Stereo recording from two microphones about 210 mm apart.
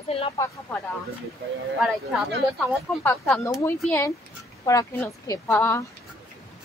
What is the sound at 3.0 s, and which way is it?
Speech, 5° left (ahead or behind).